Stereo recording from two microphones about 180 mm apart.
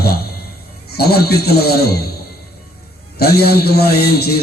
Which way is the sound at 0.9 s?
60° left (ahead or behind).